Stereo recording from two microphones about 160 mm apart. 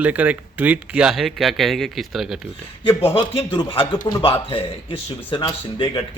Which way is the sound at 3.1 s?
35° left (ahead or behind).